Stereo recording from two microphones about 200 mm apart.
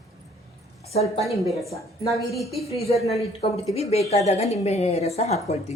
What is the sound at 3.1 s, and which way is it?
A woman's voice, 30° left (ahead or behind).